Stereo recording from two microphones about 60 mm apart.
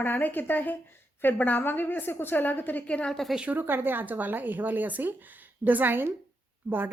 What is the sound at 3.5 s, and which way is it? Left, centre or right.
A woman's voice, right.